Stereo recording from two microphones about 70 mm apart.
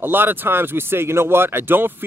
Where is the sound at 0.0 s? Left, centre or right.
Right.